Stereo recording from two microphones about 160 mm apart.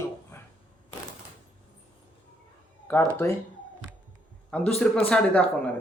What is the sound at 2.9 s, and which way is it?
Speech, 15° left (ahead or behind).